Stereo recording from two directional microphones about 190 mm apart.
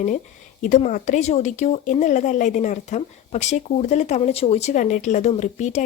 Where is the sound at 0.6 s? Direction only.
40° left (ahead or behind).